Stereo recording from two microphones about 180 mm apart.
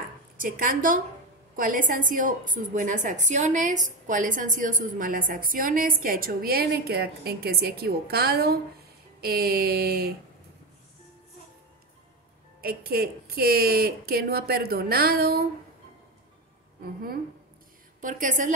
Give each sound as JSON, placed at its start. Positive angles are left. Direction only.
{"t": 0.4, "sound": "a woman's voice", "side_deg": -50}
{"t": 12.6, "sound": "a woman's voice", "side_deg": -60}
{"t": 16.8, "sound": "a woman's voice", "side_deg": -55}
{"t": 18.0, "sound": "a woman's voice", "side_deg": -45}